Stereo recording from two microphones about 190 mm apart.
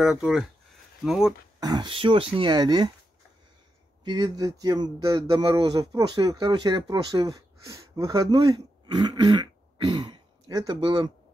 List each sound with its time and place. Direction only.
0.0 s speech: centre (ahead or behind)
1.6 s speech: 20° right (ahead or behind)
4.0 s speech: 20° right (ahead or behind)